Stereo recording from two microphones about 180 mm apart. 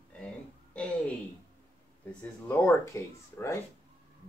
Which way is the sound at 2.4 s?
15° left (ahead or behind).